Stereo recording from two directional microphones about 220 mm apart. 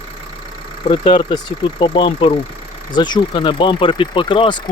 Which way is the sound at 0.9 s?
20° left (ahead or behind).